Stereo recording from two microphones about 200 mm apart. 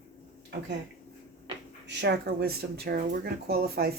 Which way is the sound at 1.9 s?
60° right (ahead or behind).